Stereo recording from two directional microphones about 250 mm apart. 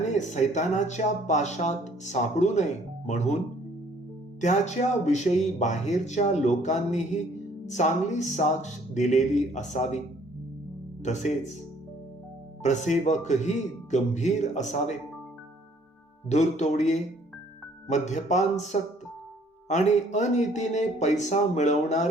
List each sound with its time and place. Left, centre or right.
0.1 s speech: left
4.4 s speech: left
11.0 s speech: left
12.6 s speech: left
16.3 s speech: left